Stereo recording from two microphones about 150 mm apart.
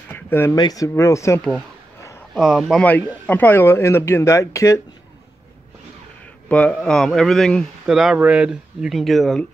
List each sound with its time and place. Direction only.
0.1 s a sound: 15° left (ahead or behind)
0.6 s speech: 25° left (ahead or behind)
2.3 s speech: 5° right (ahead or behind)
2.8 s speech: 10° left (ahead or behind)
6.5 s speech: 10° left (ahead or behind)